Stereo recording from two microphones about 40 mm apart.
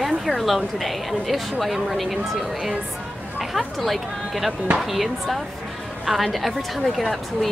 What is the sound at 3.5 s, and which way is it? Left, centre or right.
A woman's voice, centre.